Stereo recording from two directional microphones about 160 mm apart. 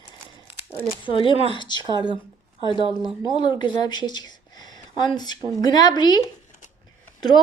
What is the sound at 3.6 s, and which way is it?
Speech, 30° left (ahead or behind).